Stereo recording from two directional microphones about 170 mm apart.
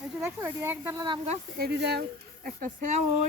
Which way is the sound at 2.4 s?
50° right (ahead or behind).